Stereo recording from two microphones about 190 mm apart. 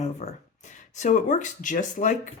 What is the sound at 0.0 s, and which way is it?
Speech, 35° left (ahead or behind).